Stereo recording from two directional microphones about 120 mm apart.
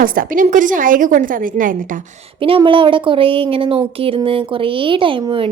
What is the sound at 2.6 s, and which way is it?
Speech, 45° right (ahead or behind).